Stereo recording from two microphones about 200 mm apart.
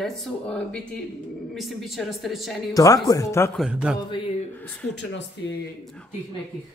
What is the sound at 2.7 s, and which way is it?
Speech, 15° left (ahead or behind).